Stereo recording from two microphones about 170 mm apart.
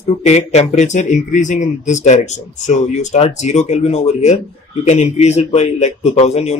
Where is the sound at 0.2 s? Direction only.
40° left (ahead or behind).